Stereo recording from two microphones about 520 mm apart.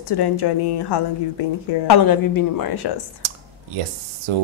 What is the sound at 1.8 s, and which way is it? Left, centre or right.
Speech, left.